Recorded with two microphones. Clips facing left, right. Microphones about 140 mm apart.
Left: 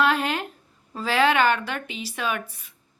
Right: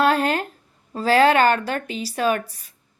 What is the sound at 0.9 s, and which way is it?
Speech, 40° right (ahead or behind).